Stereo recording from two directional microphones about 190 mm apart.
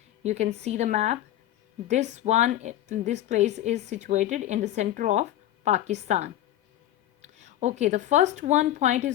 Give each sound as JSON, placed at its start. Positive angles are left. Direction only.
{"t": 0.2, "sound": "a woman's voice", "side_deg": -35}